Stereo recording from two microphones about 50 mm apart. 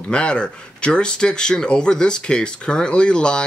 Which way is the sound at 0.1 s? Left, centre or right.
Centre.